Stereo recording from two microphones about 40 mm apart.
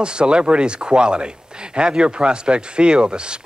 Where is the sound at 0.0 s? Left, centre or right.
Right.